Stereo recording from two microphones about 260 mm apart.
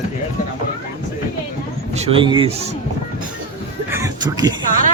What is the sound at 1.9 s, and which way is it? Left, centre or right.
Speech, right.